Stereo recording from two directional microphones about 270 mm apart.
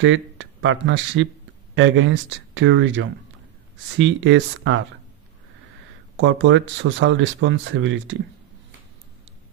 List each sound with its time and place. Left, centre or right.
0.0 s speech: right
6.1 s speech: right